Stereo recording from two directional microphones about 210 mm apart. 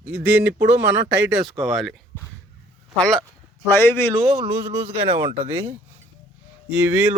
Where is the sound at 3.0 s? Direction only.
5° left (ahead or behind).